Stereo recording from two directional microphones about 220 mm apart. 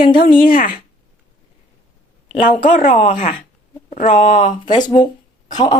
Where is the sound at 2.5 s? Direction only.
35° left (ahead or behind).